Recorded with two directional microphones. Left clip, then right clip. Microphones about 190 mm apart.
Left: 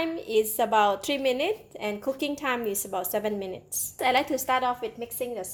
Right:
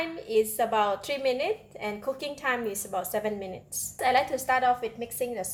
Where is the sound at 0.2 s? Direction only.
40° left (ahead or behind).